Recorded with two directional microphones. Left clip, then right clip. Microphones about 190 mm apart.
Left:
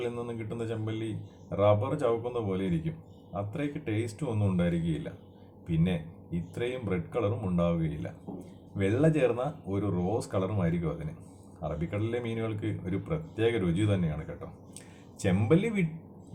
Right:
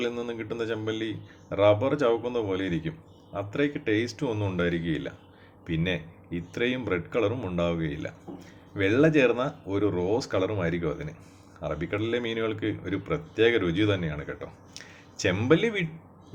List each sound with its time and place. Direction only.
0.0 s a man's voice: 15° right (ahead or behind)
15.2 s a man's voice: 20° right (ahead or behind)